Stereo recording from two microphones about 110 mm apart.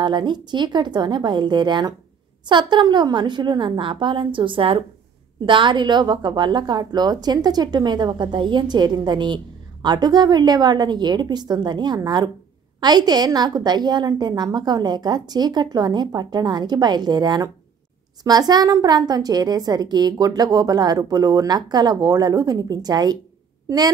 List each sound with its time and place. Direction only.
0.0 s a woman's voice: 40° right (ahead or behind)